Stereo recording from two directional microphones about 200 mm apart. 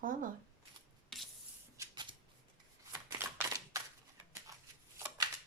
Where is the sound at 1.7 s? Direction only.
20° right (ahead or behind).